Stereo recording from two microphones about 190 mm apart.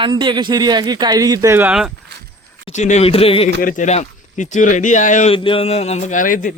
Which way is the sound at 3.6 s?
45° left (ahead or behind).